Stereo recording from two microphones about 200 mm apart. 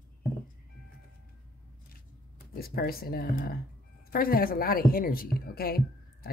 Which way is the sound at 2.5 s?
50° left (ahead or behind).